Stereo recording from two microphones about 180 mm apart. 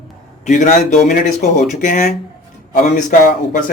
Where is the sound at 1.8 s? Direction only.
45° left (ahead or behind).